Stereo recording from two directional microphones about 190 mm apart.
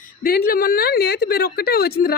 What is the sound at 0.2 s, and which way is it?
A woman's voice, 50° left (ahead or behind).